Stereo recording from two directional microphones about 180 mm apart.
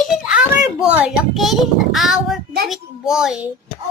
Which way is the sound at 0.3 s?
5° right (ahead or behind).